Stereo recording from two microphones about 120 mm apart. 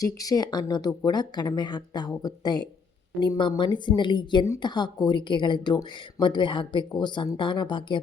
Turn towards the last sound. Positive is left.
turn(degrees=40)  # may be behind; listen again after turning